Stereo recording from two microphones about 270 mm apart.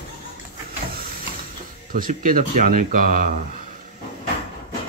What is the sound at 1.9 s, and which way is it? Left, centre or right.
Speech, right.